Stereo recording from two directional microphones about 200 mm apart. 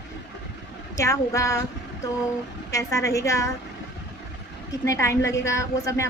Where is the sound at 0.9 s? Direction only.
15° left (ahead or behind).